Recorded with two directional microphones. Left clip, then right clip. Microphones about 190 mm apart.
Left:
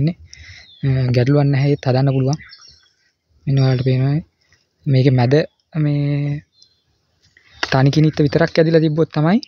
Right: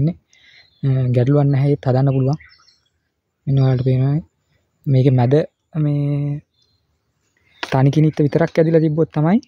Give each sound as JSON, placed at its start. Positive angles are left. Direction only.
{"t": 0.0, "sound": "speech", "side_deg": -15}
{"t": 3.4, "sound": "speech", "side_deg": -15}
{"t": 7.6, "sound": "speech", "side_deg": -20}